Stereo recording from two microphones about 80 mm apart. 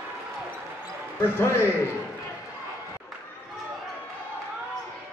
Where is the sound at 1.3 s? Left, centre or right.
Left.